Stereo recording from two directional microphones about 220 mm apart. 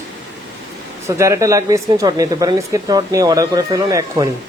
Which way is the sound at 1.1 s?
15° right (ahead or behind).